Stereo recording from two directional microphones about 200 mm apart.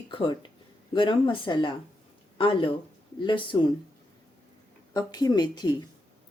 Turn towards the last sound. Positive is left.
turn(degrees=20)  # may be behind; listen again after turning